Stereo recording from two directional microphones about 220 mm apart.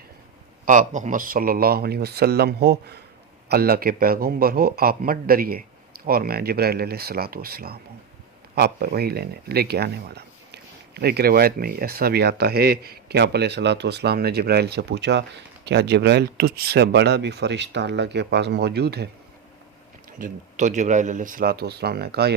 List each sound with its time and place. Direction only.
0.6 s speech: 35° right (ahead or behind)
20.1 s speech: 35° right (ahead or behind)